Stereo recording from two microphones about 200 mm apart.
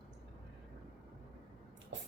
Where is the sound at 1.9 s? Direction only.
65° right (ahead or behind).